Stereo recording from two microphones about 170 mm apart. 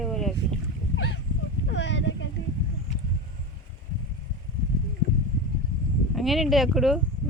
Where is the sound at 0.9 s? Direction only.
90° left.